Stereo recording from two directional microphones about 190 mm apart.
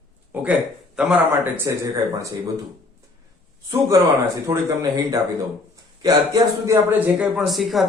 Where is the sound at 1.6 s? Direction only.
20° right (ahead or behind).